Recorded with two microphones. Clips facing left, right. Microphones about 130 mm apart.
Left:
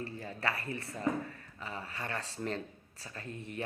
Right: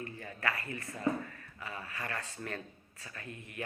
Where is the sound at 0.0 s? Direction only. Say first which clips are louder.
Left 1 dB; 30° left (ahead or behind).